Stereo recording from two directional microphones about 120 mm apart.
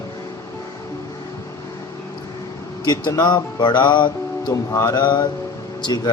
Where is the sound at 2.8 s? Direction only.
35° left (ahead or behind).